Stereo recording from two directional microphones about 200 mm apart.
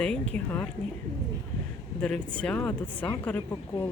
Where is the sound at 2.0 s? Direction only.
5° left (ahead or behind).